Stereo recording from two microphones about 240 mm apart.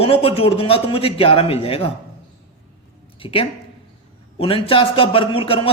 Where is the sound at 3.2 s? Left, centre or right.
Left.